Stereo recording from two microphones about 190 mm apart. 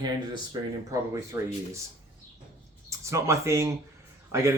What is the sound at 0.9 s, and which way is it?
Speech, 15° right (ahead or behind).